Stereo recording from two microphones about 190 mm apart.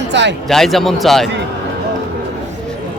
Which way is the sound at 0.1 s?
70° right (ahead or behind).